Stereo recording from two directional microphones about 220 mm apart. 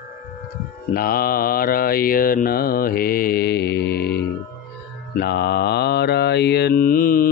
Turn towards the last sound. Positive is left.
turn(degrees=40)  # may be behind; listen again after turning